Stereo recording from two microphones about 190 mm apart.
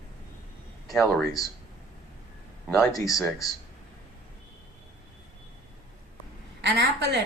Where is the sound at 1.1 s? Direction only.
Centre (ahead or behind).